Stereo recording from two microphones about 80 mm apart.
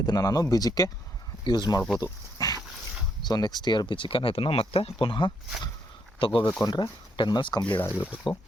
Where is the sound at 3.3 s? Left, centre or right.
Left.